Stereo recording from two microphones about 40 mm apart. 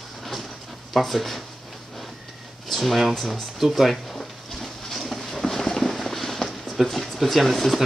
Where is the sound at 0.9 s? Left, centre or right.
Centre.